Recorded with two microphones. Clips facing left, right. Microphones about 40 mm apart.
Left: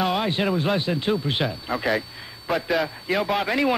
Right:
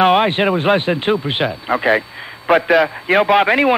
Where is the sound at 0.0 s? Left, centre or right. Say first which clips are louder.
Right 10 dB; right.